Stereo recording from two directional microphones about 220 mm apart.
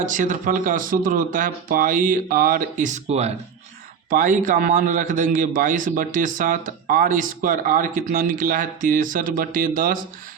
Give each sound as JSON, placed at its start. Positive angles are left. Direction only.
{"t": 0.0, "sound": "a man's voice", "side_deg": -35}